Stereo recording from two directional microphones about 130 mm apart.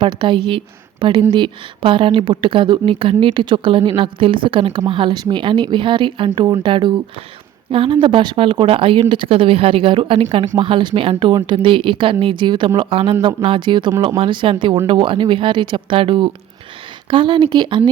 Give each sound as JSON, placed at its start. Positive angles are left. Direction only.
{"t": 0.0, "sound": "a woman's voice", "side_deg": -40}